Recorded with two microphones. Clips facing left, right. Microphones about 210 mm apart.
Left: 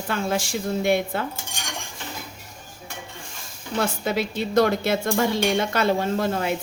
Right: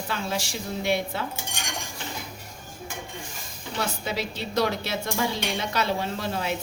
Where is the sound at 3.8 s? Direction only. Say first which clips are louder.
Left 5 dB; 50° left (ahead or behind).